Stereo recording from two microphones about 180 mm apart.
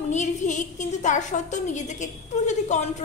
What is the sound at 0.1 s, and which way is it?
A woman's voice, 40° left (ahead or behind).